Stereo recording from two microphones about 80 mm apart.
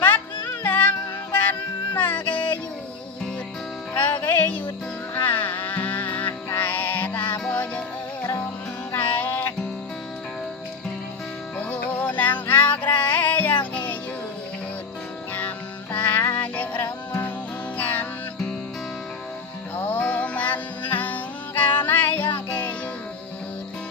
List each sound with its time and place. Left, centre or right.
0.4 s music: left
3.9 s music: left
9.0 s music: centre
11.5 s music: centre
15.3 s music: centre
19.7 s music: left